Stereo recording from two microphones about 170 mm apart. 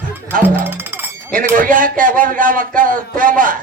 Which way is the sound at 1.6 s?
55° right (ahead or behind).